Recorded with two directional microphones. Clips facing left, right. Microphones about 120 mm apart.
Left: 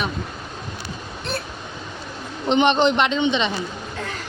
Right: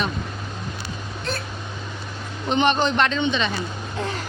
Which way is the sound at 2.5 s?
20° left (ahead or behind).